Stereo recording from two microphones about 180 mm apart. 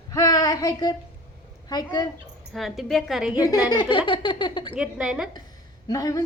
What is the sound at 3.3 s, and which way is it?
A woman's voice, 20° left (ahead or behind).